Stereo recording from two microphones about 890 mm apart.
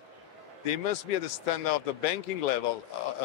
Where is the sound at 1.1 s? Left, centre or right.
Left.